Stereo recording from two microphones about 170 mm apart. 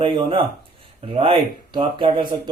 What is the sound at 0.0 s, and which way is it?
Speech, 30° right (ahead or behind).